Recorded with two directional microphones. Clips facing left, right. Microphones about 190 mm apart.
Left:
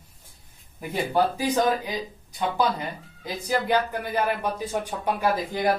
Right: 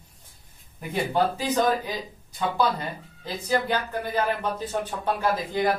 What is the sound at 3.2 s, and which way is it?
Speech, 15° left (ahead or behind).